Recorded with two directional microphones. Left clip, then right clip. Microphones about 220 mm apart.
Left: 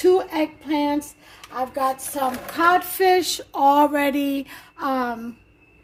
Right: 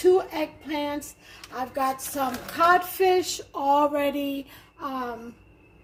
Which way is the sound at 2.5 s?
50° left (ahead or behind).